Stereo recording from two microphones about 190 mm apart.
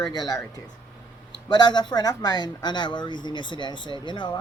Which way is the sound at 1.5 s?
20° left (ahead or behind).